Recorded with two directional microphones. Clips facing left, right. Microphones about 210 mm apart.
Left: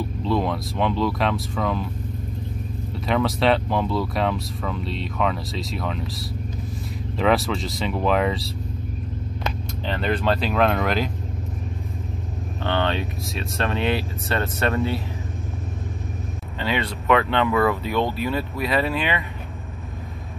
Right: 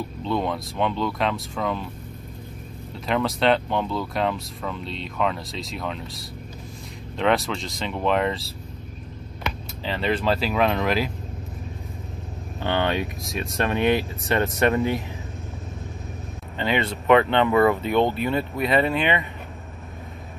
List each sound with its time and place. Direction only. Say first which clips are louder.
0.2 s speech: left 2 dB; centre (ahead or behind)
3.1 s speech: left 1 dB; centre (ahead or behind)
9.8 s speech: even; centre (ahead or behind)
12.6 s speech: even; 15° right (ahead or behind)
16.8 s speech: right 3 dB; 25° right (ahead or behind)
18.1 s speech: right 1 dB; 5° left (ahead or behind)